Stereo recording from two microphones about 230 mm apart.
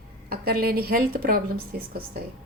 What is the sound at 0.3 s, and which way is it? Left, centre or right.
A woman's voice, right.